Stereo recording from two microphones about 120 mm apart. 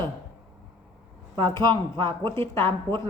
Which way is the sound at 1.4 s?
25° left (ahead or behind).